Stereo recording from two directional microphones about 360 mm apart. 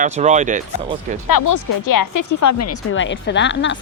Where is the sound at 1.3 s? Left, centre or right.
Left.